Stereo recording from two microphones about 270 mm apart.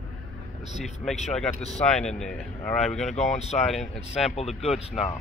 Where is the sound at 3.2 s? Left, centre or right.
Left.